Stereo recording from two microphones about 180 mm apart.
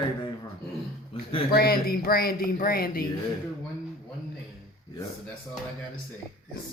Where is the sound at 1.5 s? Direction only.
55° left (ahead or behind).